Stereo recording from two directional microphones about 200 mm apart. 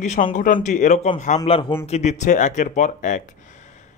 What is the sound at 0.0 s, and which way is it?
A man's voice, 35° left (ahead or behind).